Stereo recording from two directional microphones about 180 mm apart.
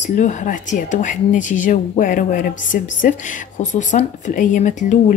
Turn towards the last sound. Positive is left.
turn(degrees=45)  # may be behind; listen again after turning